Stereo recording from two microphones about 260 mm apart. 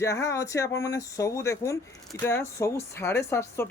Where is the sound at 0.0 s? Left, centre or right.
Centre.